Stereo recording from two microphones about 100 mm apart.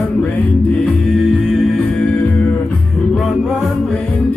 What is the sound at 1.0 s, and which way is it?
Music, centre (ahead or behind).